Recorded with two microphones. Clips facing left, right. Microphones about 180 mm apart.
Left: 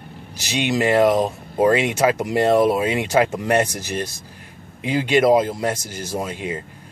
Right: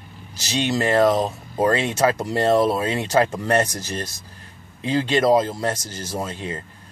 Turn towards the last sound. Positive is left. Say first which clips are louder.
# left 2 dB
turn(degrees=15)  # may be behind; listen again after turning